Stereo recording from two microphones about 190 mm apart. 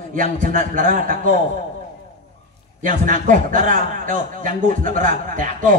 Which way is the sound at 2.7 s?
45° right (ahead or behind).